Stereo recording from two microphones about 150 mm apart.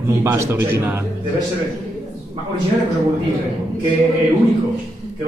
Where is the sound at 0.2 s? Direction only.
15° right (ahead or behind).